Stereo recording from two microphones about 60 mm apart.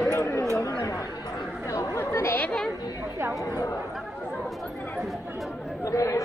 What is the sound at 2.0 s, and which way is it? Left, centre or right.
Chatter, left.